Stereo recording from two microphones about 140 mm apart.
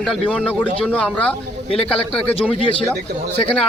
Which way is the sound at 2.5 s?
40° left (ahead or behind).